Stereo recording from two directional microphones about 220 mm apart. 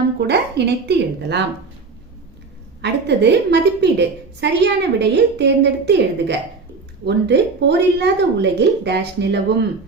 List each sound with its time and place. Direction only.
0.2 s a woman's voice: 50° right (ahead or behind)
2.8 s a woman's voice: 50° right (ahead or behind)